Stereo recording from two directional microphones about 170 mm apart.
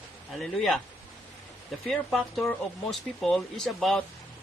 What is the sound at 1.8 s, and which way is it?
A man's voice, centre (ahead or behind).